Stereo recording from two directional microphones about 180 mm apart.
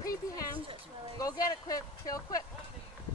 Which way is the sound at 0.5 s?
30° right (ahead or behind).